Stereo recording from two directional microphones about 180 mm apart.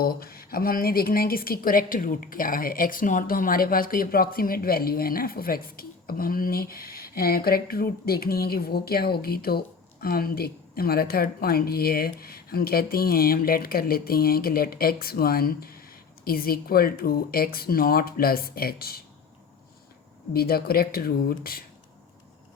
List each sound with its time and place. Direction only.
0.0 s a woman's voice: 55° left (ahead or behind)
20.3 s a woman's voice: 60° left (ahead or behind)